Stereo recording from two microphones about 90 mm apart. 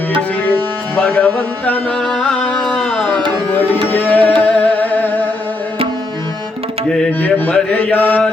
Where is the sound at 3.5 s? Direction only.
20° left (ahead or behind).